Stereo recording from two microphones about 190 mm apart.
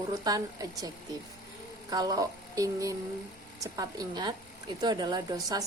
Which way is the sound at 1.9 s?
20° right (ahead or behind).